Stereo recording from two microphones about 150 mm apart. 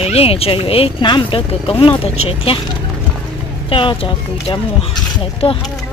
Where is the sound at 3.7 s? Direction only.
35° left (ahead or behind).